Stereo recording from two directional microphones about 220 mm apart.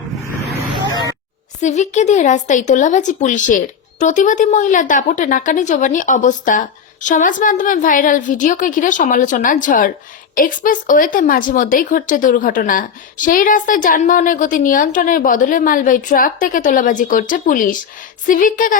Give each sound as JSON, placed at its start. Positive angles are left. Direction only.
{"t": 1.6, "sound": "a woman's voice", "side_deg": 35}